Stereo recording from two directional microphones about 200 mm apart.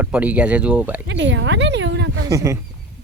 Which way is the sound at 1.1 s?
65° right (ahead or behind).